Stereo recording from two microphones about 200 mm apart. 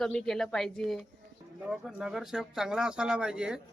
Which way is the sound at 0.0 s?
Centre (ahead or behind).